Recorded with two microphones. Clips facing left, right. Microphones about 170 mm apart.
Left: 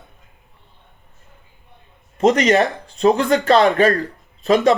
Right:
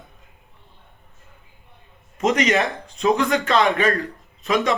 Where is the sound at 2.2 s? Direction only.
35° left (ahead or behind).